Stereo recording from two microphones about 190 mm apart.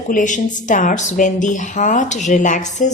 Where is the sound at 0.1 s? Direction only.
45° left (ahead or behind).